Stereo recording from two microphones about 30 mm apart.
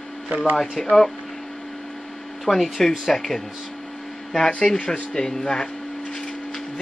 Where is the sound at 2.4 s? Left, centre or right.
Centre.